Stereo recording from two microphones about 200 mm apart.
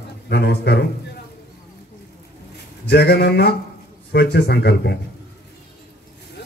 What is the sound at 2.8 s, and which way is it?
A man's voice, 55° left (ahead or behind).